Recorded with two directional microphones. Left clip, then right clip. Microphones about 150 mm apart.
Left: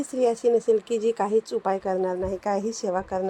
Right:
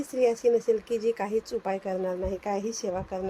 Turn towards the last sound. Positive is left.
turn(degrees=20)  # may be behind; listen again after turning